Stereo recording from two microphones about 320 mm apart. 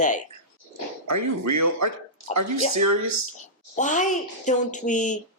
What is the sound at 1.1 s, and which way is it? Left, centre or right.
Speech, right.